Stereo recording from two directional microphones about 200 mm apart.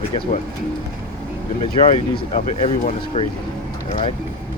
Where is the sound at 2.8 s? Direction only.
30° left (ahead or behind).